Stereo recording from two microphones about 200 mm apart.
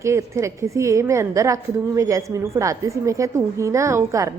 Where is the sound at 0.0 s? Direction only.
15° right (ahead or behind).